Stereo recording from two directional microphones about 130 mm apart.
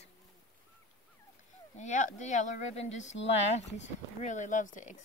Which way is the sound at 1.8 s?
70° left (ahead or behind).